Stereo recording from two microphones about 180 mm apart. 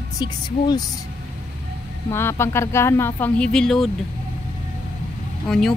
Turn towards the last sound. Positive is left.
turn(degrees=0)  # may be behind; listen again after turning